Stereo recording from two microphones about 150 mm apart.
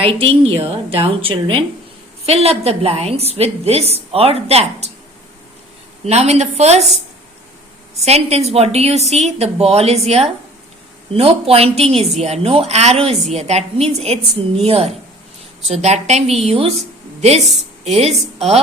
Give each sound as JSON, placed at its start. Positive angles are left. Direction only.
{"t": 0.0, "sound": "a woman's voice", "side_deg": -40}
{"t": 6.1, "sound": "a woman's voice", "side_deg": -45}
{"t": 8.0, "sound": "a woman's voice", "side_deg": -45}